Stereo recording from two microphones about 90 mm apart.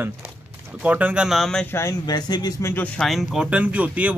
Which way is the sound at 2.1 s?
50° left (ahead or behind).